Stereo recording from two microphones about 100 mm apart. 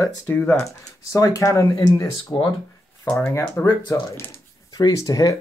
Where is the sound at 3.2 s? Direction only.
25° left (ahead or behind).